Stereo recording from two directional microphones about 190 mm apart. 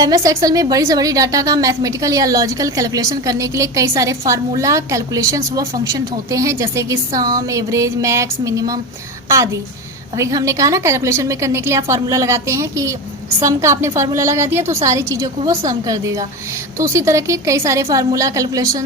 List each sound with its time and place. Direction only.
0.0 s a woman's voice: 20° right (ahead or behind)
10.2 s a woman's voice: 15° right (ahead or behind)